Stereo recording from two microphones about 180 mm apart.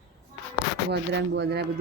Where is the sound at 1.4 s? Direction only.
70° right (ahead or behind).